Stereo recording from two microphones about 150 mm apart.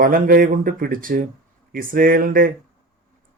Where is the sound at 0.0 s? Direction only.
70° right (ahead or behind).